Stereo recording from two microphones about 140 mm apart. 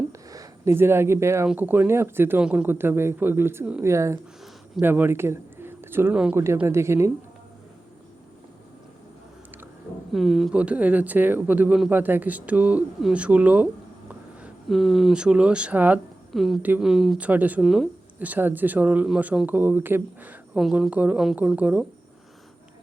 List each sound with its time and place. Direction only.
0.1 s a sound: 25° right (ahead or behind)
1.5 s a woman's voice: 15° right (ahead or behind)
10.1 s speech: centre (ahead or behind)
14.4 s speech: centre (ahead or behind)
16.3 s speech: centre (ahead or behind)
20.6 s a woman's voice: centre (ahead or behind)